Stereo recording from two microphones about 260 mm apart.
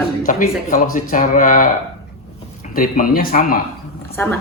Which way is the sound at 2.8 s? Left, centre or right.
Left.